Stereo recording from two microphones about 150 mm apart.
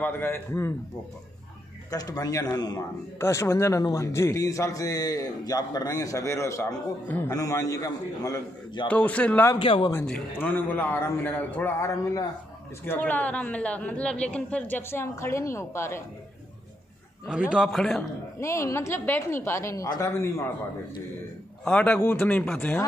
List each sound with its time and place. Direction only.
0.0 s a man's voice: 15° left (ahead or behind)
1.9 s a man's voice: 25° left (ahead or behind)
8.8 s a man's voice: 10° left (ahead or behind)
9.6 s speech: 35° left (ahead or behind)
10.0 s a man's voice: 10° left (ahead or behind)
17.3 s a man's voice: 5° right (ahead or behind)
18.4 s a man's voice: 20° left (ahead or behind)
21.6 s a man's voice: 10° left (ahead or behind)